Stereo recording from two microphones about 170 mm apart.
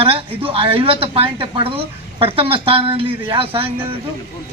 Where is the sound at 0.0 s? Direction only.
30° right (ahead or behind).